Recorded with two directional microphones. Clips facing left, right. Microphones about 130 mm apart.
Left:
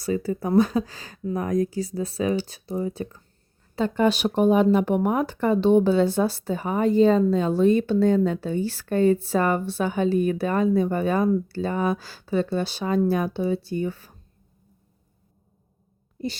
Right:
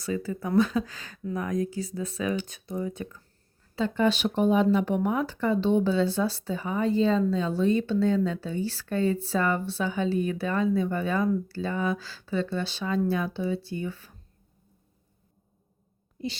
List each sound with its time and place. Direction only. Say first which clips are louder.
0.0 s speech: left 5 dB; 40° left (ahead or behind)
3.8 s a woman's voice: left 3 dB; 50° left (ahead or behind)